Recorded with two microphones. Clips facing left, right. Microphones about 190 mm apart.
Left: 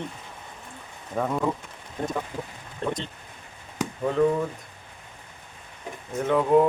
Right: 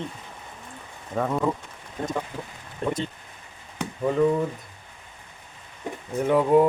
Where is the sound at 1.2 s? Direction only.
Centre (ahead or behind).